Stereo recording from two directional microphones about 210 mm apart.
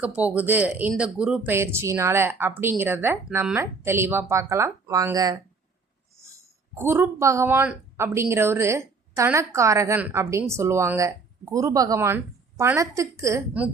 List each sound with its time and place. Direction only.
0.0 s speech: 5° right (ahead or behind)
6.7 s speech: 10° right (ahead or behind)